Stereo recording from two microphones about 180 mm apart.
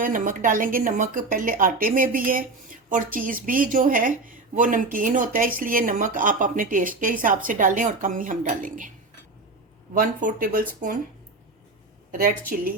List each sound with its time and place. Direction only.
0.0 s a woman's voice: 50° right (ahead or behind)
9.9 s a woman's voice: 50° right (ahead or behind)